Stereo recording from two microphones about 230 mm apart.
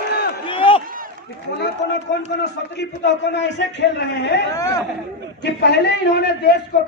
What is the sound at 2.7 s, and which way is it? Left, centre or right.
A man's voice, left.